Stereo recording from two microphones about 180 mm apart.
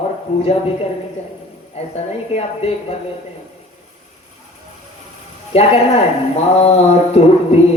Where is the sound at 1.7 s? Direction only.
35° left (ahead or behind).